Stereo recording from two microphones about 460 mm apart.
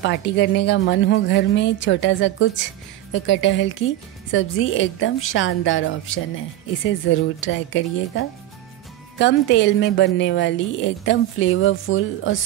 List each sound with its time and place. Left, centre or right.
0.0 s speech: left